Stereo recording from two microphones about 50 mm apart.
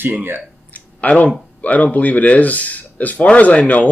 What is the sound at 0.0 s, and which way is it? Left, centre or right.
Speech, right.